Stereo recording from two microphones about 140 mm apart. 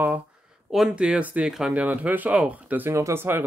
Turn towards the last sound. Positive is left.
turn(degrees=-15)  # may be behind; listen again after turning